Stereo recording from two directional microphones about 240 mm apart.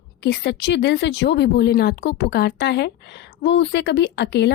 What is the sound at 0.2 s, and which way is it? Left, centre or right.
Speech, left.